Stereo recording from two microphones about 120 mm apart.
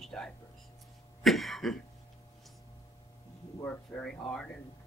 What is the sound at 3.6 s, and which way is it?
Speech, 10° left (ahead or behind).